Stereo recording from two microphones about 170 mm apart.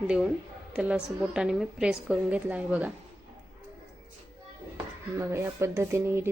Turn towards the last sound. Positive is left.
turn(degrees=-15)  # may be behind; listen again after turning